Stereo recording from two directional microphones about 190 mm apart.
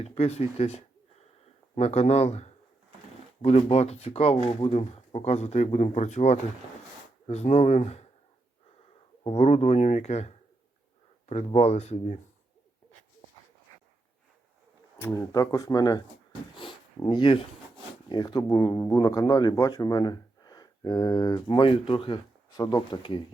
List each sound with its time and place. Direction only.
0.0 s speech: 30° left (ahead or behind)
9.2 s speech: 30° left (ahead or behind)
15.0 s speech: 15° left (ahead or behind)